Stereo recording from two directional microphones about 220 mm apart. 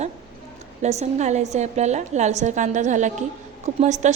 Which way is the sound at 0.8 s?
30° right (ahead or behind).